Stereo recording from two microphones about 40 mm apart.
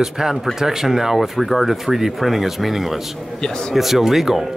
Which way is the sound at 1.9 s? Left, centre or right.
Centre.